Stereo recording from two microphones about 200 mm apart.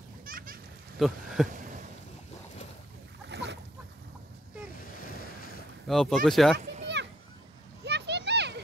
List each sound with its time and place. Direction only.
0.2 s splash: 45° right (ahead or behind)
0.9 s speech: centre (ahead or behind)
1.5 s a sound: 40° right (ahead or behind)
3.3 s boat: 60° right (ahead or behind)
5.9 s speech: centre (ahead or behind)
6.6 s children playing: 35° right (ahead or behind)
7.8 s a sound: 60° right (ahead or behind)